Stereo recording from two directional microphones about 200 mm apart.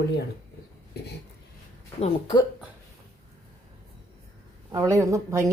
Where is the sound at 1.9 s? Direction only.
30° left (ahead or behind).